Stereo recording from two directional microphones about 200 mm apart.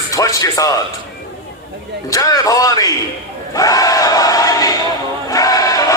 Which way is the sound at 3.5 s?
15° left (ahead or behind).